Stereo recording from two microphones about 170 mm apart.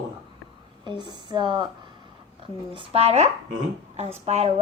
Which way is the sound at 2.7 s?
35° right (ahead or behind).